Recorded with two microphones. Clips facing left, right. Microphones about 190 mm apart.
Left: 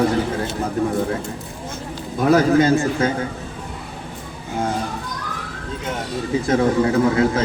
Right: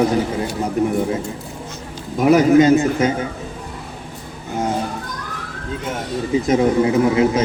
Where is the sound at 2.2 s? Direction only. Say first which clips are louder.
Right 3 dB; 20° right (ahead or behind).